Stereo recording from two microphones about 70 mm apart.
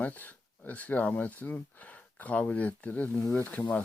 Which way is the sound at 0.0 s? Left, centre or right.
Left.